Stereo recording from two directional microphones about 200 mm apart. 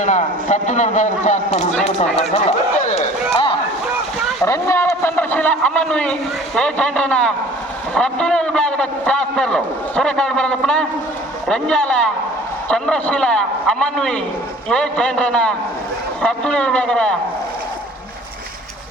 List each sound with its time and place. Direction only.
0.0 s a man's voice: 35° left (ahead or behind)
2.3 s run: 30° left (ahead or behind)
4.4 s a man's voice: 15° left (ahead or behind)